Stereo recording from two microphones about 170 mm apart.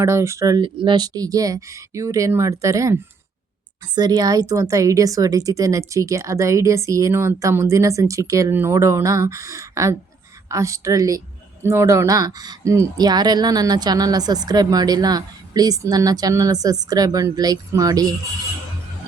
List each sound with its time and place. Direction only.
0.0 s speech: 15° right (ahead or behind)